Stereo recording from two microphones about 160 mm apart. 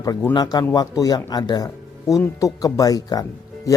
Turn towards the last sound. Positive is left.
turn(degrees=25)  # may be behind; listen again after turning